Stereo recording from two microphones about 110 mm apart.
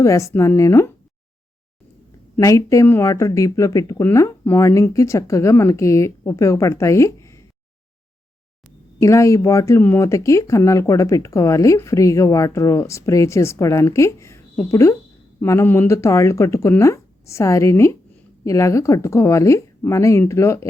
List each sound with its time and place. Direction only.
0.0 s speech: 30° left (ahead or behind)
2.4 s speech: 30° left (ahead or behind)
9.0 s speech: 30° left (ahead or behind)